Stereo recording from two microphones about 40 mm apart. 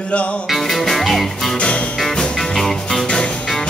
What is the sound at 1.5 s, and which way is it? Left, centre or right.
Music, left.